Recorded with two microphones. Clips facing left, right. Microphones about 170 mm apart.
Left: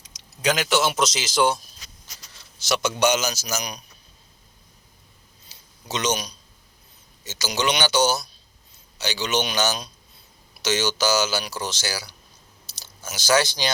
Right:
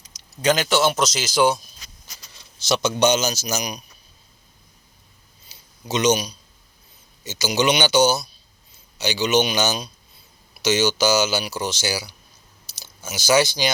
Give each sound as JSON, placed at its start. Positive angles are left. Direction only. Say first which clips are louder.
{"t": 0.4, "sound": "a man's voice", "louder": "right 3 dB", "side_deg": 0}
{"t": 2.3, "sound": "a sound", "louder": "right 3 dB", "side_deg": -15}
{"t": 2.8, "sound": "speech", "louder": "right 2 dB", "side_deg": -25}
{"t": 5.9, "sound": "speech", "louder": "right 6 dB", "side_deg": -10}